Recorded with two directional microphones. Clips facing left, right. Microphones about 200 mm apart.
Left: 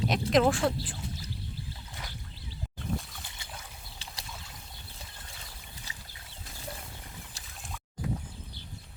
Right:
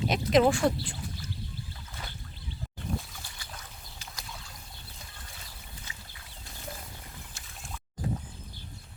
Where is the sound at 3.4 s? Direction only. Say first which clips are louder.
Left 1 dB; 25° left (ahead or behind).